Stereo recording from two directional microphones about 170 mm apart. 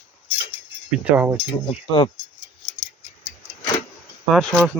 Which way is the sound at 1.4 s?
35° left (ahead or behind).